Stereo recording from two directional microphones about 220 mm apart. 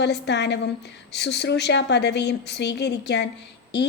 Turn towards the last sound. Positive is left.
turn(degrees=50)  # may be behind; listen again after turning